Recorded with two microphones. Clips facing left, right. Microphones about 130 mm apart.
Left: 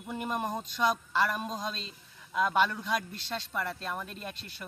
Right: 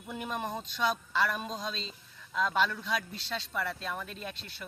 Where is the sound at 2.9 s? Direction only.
45° left (ahead or behind).